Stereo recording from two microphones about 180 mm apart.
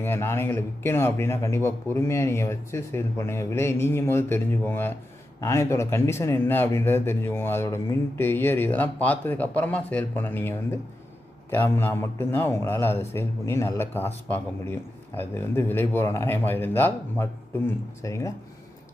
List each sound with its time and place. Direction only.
0.0 s a man's voice: 15° left (ahead or behind)